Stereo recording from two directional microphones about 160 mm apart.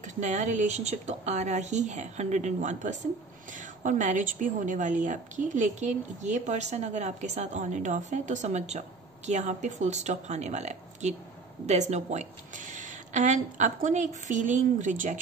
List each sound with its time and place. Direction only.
0.0 s a woman's voice: 50° right (ahead or behind)